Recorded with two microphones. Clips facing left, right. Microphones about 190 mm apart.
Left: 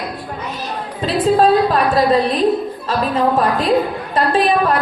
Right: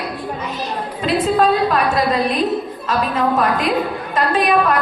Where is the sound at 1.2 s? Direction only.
30° left (ahead or behind).